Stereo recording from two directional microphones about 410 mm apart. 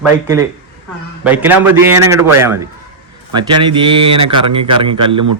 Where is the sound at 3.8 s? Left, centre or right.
Centre.